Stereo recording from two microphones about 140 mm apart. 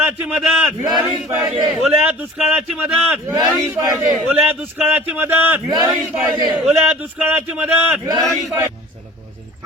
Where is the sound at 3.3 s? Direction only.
30° right (ahead or behind).